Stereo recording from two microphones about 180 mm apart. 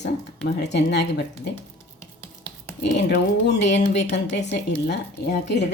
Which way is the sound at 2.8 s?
70° left (ahead or behind).